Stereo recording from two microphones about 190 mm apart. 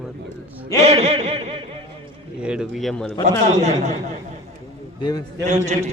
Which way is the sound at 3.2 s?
40° right (ahead or behind).